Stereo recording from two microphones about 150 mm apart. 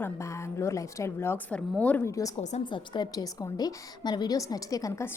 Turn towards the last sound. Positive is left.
turn(degrees=20)  # may be behind; listen again after turning